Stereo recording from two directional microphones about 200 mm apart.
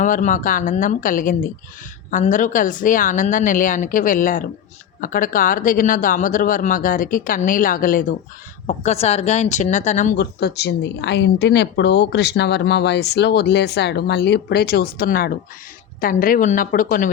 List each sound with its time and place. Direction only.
0.0 s a woman's voice: 40° left (ahead or behind)
8.6 s a woman's voice: 30° left (ahead or behind)
10.2 s speech: 55° left (ahead or behind)